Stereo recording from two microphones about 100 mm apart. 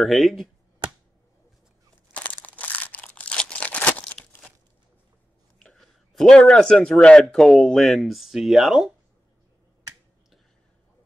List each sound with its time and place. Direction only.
0.0 s speech: centre (ahead or behind)
2.1 s a sound: 15° left (ahead or behind)
5.6 s speech: 5° left (ahead or behind)